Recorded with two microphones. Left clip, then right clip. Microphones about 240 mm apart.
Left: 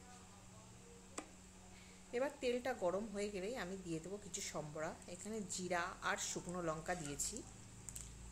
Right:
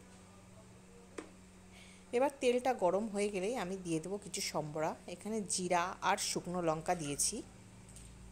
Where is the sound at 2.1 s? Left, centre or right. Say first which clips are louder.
Right 8 dB; right.